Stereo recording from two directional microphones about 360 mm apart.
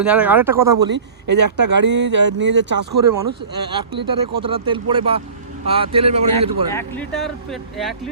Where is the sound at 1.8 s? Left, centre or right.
Right.